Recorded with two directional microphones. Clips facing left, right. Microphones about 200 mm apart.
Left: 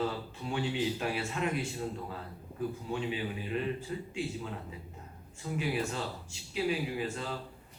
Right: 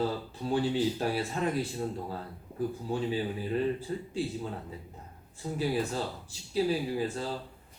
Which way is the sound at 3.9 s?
35° right (ahead or behind).